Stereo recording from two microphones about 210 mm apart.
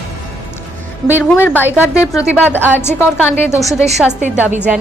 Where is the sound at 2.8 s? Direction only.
10° left (ahead or behind).